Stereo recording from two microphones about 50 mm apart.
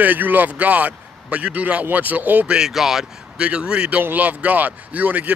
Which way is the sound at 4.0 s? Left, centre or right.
Right.